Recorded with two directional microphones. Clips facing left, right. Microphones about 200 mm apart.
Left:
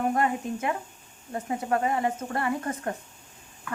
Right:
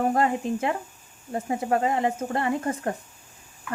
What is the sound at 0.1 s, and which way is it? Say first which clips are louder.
Speech: right 3 dB; 30° right (ahead or behind).